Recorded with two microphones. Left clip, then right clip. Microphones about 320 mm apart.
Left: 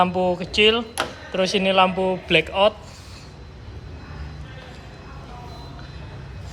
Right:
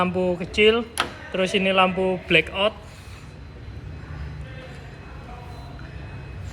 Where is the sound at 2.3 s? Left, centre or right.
Left.